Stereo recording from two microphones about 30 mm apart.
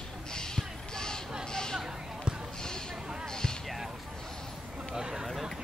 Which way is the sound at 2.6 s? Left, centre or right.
Left.